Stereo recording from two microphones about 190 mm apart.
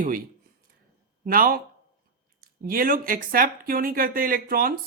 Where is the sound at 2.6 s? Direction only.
50° right (ahead or behind).